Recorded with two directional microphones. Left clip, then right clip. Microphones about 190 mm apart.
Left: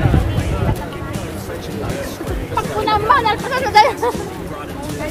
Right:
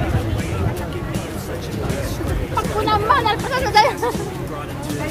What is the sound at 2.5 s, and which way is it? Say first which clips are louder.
Speech: left 2 dB; 15° right (ahead or behind).